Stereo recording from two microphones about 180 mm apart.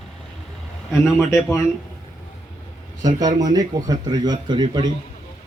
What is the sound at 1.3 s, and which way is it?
Speech, 15° left (ahead or behind).